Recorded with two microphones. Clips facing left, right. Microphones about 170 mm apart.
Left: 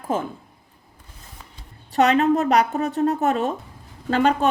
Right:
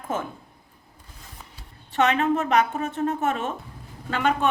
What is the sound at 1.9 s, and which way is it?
A woman's voice, 40° left (ahead or behind).